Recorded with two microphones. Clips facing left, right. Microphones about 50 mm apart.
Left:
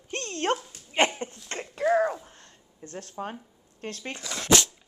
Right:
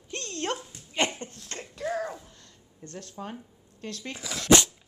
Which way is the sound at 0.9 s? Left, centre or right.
Left.